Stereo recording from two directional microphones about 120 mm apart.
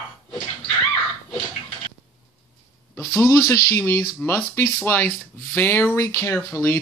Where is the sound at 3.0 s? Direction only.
20° left (ahead or behind).